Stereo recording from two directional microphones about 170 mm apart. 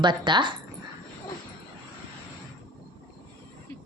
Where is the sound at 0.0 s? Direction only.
25° right (ahead or behind).